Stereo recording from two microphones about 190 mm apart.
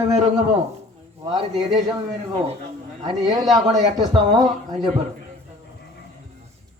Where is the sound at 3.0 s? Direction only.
25° right (ahead or behind).